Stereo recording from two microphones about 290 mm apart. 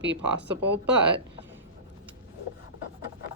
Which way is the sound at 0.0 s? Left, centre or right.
Right.